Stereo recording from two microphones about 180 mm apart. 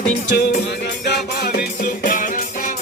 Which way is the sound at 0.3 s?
70° left (ahead or behind).